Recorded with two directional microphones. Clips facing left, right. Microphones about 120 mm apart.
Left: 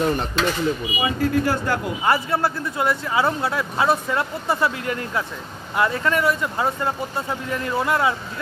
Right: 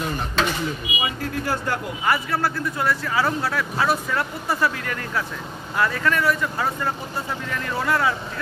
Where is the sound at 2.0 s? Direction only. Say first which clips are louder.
Left 2 dB; 25° left (ahead or behind).